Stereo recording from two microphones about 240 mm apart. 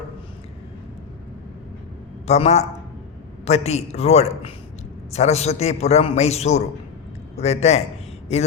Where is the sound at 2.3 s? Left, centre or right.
Left.